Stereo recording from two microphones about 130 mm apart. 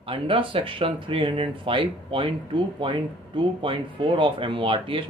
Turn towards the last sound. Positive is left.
turn(degrees=-40)  # may be behind; listen again after turning